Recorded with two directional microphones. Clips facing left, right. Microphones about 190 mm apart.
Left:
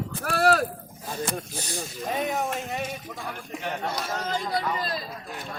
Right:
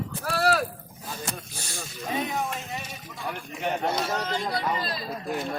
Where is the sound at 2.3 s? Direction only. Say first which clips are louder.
Left 2 dB; 50° left (ahead or behind).